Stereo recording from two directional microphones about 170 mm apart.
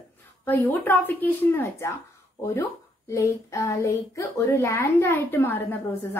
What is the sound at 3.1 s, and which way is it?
A woman's voice, 15° left (ahead or behind).